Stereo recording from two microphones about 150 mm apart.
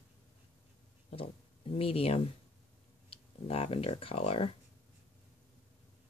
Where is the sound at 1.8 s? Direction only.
40° left (ahead or behind).